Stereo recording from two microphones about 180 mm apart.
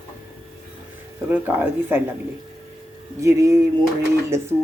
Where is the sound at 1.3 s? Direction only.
10° right (ahead or behind).